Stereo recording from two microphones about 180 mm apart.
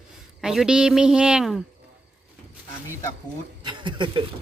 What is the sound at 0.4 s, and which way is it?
A woman's voice, 5° right (ahead or behind).